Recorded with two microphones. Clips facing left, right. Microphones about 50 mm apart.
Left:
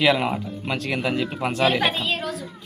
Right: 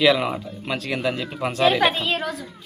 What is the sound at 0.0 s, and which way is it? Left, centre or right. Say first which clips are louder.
Speech: right 1 dB; centre.